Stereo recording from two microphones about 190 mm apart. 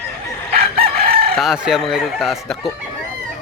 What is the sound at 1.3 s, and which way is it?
Crowing, centre (ahead or behind).